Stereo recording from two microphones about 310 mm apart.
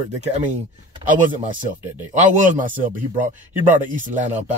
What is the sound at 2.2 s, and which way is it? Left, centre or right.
A man's voice, right.